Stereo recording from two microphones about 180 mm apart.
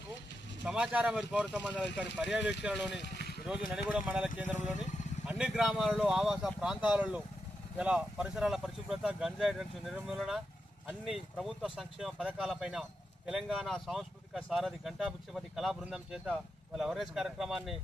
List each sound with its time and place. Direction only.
0.6 s speech: 5° right (ahead or behind)
3.0 s vehicle: 65° left (ahead or behind)
3.4 s speech: 5° right (ahead or behind)